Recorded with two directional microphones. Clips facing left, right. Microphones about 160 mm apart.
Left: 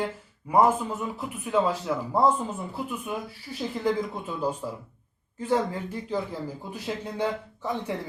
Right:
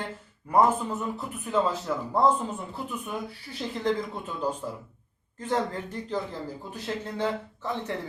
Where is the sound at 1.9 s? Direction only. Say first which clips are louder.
Left 2 dB; 10° left (ahead or behind).